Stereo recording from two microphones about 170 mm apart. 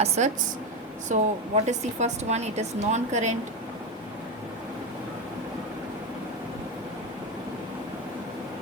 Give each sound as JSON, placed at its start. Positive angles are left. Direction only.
{"t": 0.2, "sound": "a woman's voice", "side_deg": -45}